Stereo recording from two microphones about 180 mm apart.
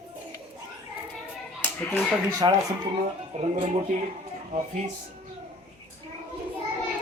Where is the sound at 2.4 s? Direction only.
25° right (ahead or behind).